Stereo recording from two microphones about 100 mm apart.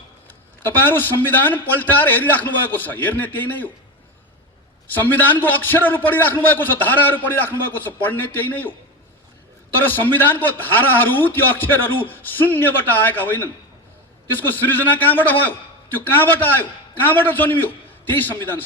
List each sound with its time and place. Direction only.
0.3 s a man's voice: 20° left (ahead or behind)
4.9 s a man's voice: 20° left (ahead or behind)
9.7 s a man's voice: 20° left (ahead or behind)